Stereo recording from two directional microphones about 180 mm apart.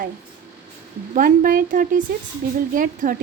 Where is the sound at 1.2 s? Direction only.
50° right (ahead or behind).